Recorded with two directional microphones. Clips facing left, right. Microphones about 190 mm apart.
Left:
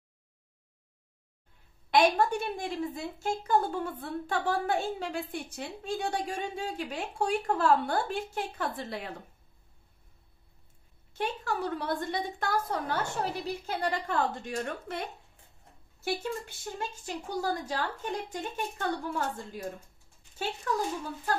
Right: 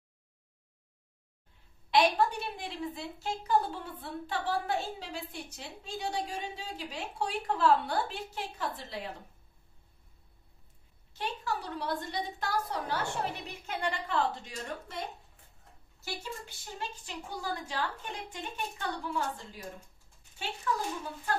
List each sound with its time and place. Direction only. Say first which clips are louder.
1.9 s a woman's voice: left 2 dB; 50° left (ahead or behind)
11.1 s a woman's voice: left 4 dB; 55° left (ahead or behind)
17.0 s a woman's voice: left 6 dB; 45° left (ahead or behind)